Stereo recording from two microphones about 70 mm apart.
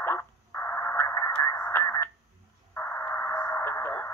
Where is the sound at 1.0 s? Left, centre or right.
Left.